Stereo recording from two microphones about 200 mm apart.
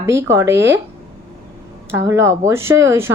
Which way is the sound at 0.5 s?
65° right (ahead or behind).